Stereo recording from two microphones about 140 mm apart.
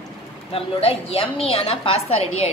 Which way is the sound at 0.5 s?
45° left (ahead or behind).